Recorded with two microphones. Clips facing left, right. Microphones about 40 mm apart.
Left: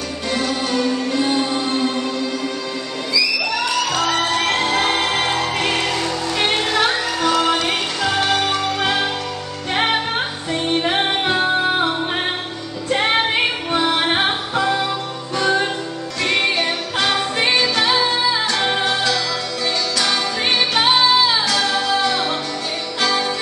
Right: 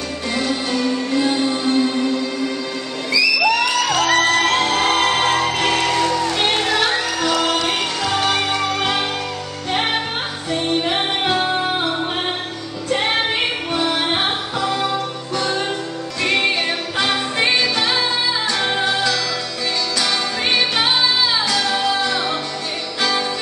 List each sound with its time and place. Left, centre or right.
0.3 s music: centre
3.9 s music: centre
4.6 s music: centre
5.9 s music: centre
8.3 s music: centre
11.0 s music: centre
12.9 s music: centre
14.1 s music: centre
16.2 s music: centre